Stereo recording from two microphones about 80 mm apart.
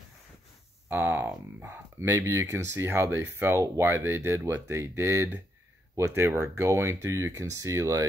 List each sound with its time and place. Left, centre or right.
0.8 s speech: right